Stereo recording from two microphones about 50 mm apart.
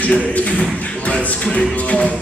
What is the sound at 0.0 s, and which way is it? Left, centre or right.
Speech, left.